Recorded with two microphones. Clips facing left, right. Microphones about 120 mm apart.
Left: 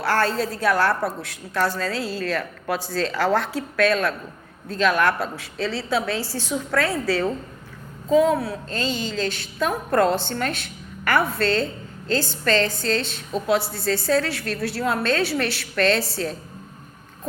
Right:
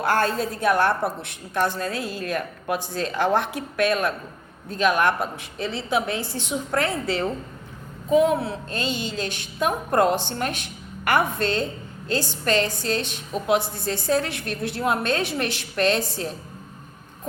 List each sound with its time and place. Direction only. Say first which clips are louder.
0.0 s a woman's voice: even; 20° right (ahead or behind)